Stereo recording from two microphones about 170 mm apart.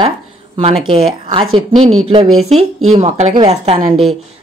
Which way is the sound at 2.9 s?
40° right (ahead or behind).